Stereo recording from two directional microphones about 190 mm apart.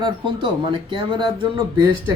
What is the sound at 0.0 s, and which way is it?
Speech, 25° right (ahead or behind).